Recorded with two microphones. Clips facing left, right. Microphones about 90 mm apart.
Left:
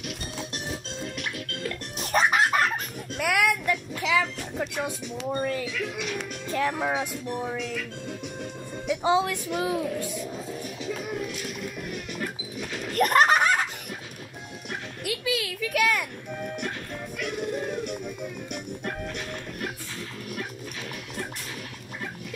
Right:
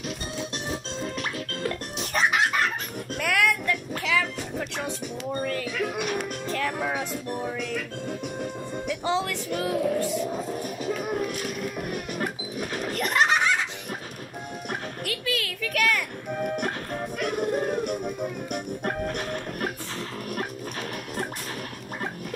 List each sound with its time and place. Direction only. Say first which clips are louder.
1.2 s music: right 3 dB; 35° right (ahead or behind)
2.1 s chicken: left 2 dB; 40° left (ahead or behind)
3.2 s a sound: even; 15° left (ahead or behind)
4.0 s music: left 2 dB; 15° left (ahead or behind)
5.4 s speech: left 1 dB; 15° left (ahead or behind)
5.7 s speech: right 3 dB; 50° right (ahead or behind)
6.5 s speech: left 3 dB; 20° left (ahead or behind)
8.8 s speech: left 4 dB; 15° left (ahead or behind)
9.8 s a sound: right 6 dB; 45° right (ahead or behind)
12.9 s giggle: left 4 dB; 45° left (ahead or behind)
15.0 s a sound: left 3 dB; 15° left (ahead or behind)
16.3 s music: right 5 dB; 50° right (ahead or behind)